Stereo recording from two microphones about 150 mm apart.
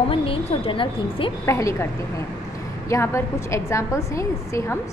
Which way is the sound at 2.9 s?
20° left (ahead or behind).